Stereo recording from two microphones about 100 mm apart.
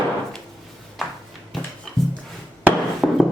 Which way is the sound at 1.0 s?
Centre (ahead or behind).